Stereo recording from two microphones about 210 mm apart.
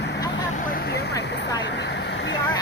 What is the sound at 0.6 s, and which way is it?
Speech, 45° left (ahead or behind).